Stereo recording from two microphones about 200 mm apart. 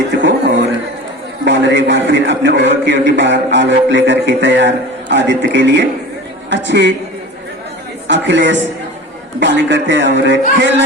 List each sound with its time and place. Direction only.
0.2 s a sound: 60° right (ahead or behind)
1.5 s a man's voice: 65° right (ahead or behind)
8.0 s a man's voice: 65° right (ahead or behind)